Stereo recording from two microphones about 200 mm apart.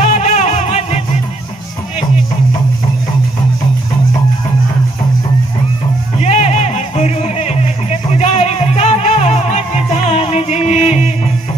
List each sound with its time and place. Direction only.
0.0 s music: 35° left (ahead or behind)
6.1 s music: 35° left (ahead or behind)